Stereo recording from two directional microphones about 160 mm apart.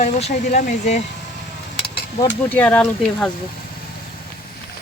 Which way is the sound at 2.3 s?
10° left (ahead or behind).